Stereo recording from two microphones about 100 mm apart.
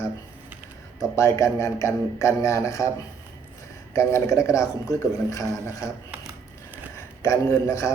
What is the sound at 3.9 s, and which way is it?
Speech, 30° left (ahead or behind).